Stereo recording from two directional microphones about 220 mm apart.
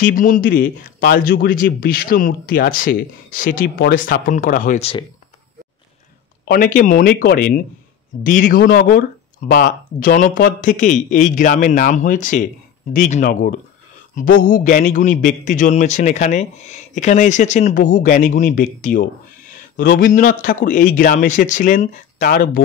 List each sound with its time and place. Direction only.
0.1 s speech: 40° left (ahead or behind)
6.4 s speech: 40° left (ahead or behind)